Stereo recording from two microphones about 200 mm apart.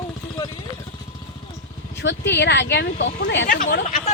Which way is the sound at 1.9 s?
60° left (ahead or behind).